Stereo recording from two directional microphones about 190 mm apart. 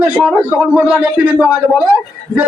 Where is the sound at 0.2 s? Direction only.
5° right (ahead or behind).